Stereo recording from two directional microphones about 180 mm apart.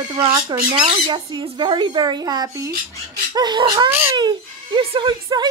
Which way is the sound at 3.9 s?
10° right (ahead or behind).